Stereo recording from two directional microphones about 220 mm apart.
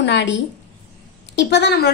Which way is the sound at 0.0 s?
55° left (ahead or behind).